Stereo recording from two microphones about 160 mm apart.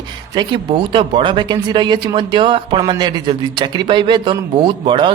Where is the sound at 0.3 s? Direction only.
30° right (ahead or behind).